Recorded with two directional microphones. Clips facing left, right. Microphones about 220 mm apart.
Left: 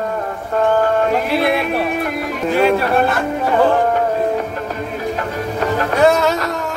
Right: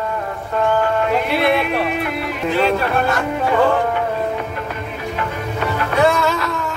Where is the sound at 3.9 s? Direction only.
40° left (ahead or behind).